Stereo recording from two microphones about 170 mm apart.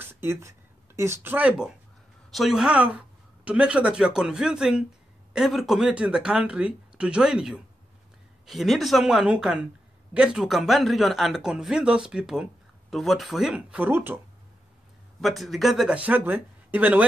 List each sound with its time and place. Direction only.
0.0 s speech: 15° right (ahead or behind)
15.1 s speech: centre (ahead or behind)